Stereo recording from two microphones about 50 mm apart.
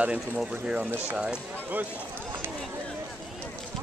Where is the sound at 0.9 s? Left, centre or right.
Right.